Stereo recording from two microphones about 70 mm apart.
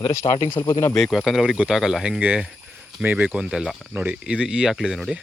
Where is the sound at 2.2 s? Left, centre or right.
Right.